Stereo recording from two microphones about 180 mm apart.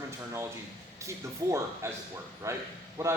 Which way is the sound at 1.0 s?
15° right (ahead or behind).